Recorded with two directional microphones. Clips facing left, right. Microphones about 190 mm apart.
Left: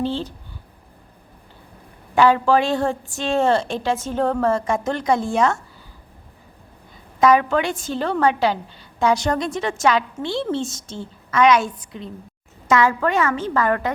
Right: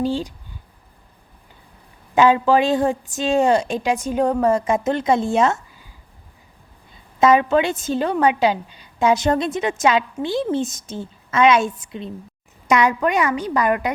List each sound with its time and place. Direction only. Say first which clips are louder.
0.0 s a woman's voice: right 2 dB; 15° right (ahead or behind)
2.1 s a woman's voice: right 1 dB; 20° right (ahead or behind)
7.2 s a woman's voice: right 1 dB; 25° right (ahead or behind)